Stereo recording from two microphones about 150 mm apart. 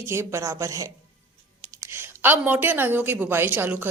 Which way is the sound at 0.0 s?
15° right (ahead or behind).